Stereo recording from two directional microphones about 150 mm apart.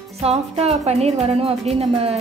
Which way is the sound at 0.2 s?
45° right (ahead or behind).